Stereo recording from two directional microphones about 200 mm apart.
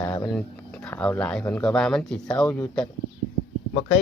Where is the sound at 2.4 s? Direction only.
15° left (ahead or behind).